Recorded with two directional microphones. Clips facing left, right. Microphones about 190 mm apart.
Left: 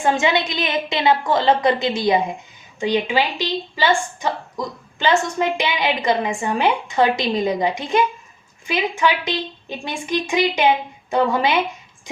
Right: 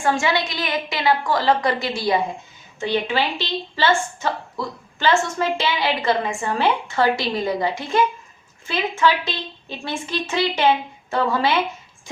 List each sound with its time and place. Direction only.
0.0 s a woman's voice: 20° left (ahead or behind)